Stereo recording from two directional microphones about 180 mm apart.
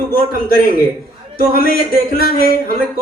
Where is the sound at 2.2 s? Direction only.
55° left (ahead or behind).